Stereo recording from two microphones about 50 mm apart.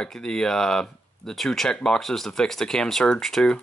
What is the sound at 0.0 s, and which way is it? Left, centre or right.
Speech, centre.